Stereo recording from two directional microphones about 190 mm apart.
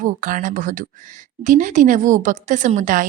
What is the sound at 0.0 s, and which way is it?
A woman's voice, 45° right (ahead or behind).